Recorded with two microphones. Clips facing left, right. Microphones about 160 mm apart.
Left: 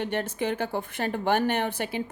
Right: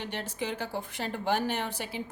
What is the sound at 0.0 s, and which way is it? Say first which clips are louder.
A woman's voice: left 7 dB; 55° left (ahead or behind).